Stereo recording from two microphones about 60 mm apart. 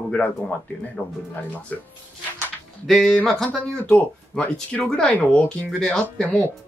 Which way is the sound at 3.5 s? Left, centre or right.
Left.